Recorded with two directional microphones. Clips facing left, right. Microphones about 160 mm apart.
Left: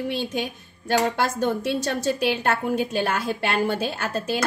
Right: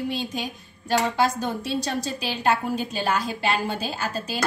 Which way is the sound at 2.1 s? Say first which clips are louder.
Left 4 dB; 60° left (ahead or behind).